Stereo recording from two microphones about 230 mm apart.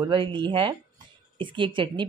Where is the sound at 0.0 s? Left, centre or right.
Right.